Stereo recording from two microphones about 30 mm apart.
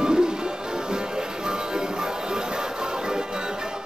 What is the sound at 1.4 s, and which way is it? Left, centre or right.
Music, right.